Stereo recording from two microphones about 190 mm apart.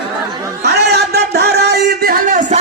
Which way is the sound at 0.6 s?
60° right (ahead or behind).